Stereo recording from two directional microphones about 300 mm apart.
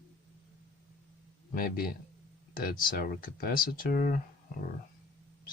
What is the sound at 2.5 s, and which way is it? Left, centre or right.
Speech, left.